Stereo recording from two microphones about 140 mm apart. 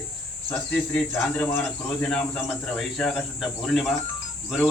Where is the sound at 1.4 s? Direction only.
10° left (ahead or behind).